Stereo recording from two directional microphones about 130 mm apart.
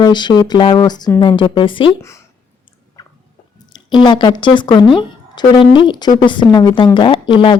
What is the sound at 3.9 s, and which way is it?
A woman's voice, 35° left (ahead or behind).